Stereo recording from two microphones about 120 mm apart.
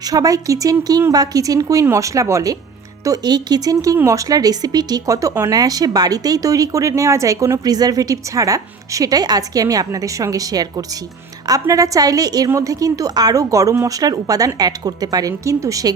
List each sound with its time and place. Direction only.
0.1 s a woman's voice: 30° right (ahead or behind)